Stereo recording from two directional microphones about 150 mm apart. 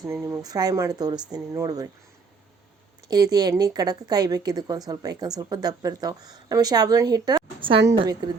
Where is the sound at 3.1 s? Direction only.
25° right (ahead or behind).